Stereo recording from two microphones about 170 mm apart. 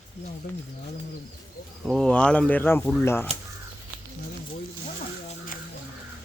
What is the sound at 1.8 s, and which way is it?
Speech, 5° left (ahead or behind).